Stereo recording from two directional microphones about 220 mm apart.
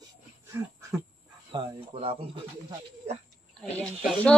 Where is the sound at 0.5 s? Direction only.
15° right (ahead or behind).